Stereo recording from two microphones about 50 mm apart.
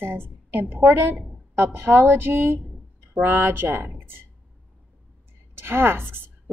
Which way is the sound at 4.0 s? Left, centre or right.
Right.